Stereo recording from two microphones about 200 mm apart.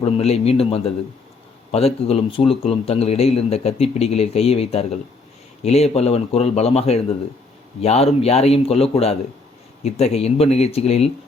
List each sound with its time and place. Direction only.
0.0 s a man's voice: 30° left (ahead or behind)